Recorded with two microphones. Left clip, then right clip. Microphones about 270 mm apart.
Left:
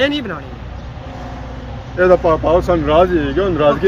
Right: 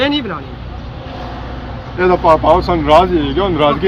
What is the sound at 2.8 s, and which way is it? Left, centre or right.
Speech, right.